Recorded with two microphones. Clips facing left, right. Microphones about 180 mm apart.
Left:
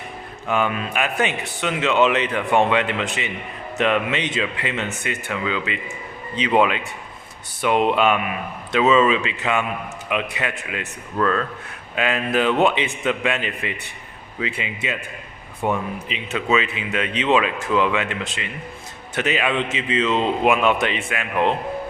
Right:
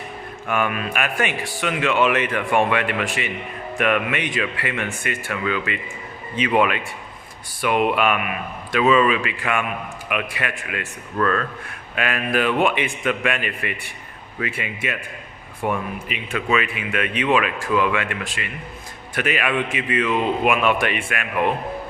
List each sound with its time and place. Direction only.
0.4 s speech: 20° left (ahead or behind)